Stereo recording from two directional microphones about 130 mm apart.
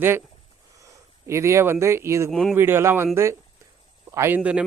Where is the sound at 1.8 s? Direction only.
20° right (ahead or behind).